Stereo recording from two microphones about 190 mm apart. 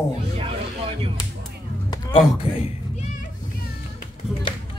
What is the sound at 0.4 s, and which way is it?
Music, 30° right (ahead or behind).